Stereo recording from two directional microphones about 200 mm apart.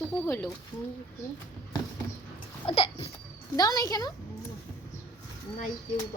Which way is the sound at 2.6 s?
25° left (ahead or behind).